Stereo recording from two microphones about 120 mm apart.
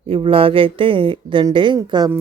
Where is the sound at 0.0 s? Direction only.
50° right (ahead or behind).